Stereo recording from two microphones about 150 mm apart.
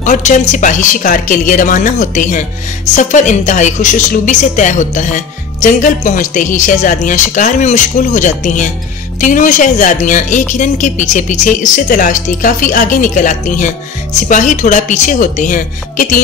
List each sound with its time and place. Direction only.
0.0 s a woman's voice: 55° left (ahead or behind)